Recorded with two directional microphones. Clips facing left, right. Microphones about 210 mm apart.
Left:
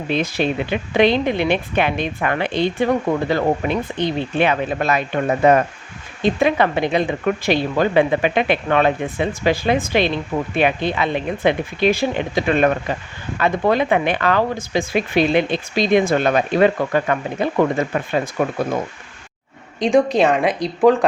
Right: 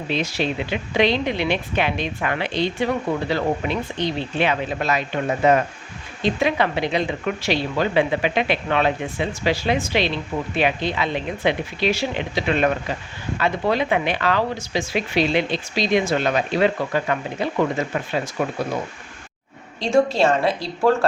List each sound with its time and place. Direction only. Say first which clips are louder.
0.1 s speech: left 4 dB; 50° left (ahead or behind)
19.8 s a woman's voice: left 3 dB; 20° left (ahead or behind)